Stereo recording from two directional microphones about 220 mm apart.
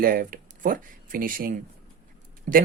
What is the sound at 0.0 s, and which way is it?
Speech, 40° right (ahead or behind).